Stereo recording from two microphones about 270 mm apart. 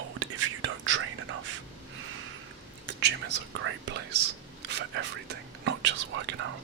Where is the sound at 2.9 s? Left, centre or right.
Right.